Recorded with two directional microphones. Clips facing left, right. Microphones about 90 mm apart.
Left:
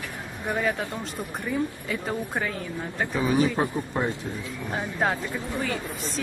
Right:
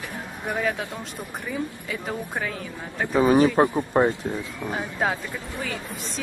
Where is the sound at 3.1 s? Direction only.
40° right (ahead or behind).